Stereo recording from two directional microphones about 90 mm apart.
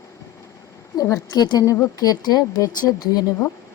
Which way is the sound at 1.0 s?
45° left (ahead or behind).